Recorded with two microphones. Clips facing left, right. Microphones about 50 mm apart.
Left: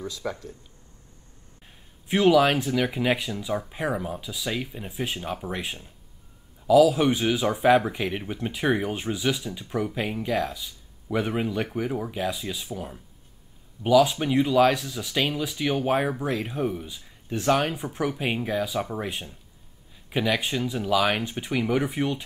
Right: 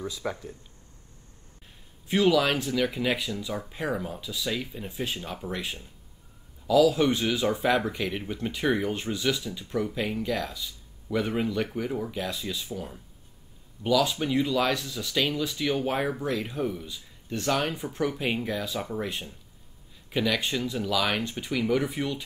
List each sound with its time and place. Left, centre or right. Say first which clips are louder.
0.0 s speech: even; centre
2.0 s speech: left 4 dB; centre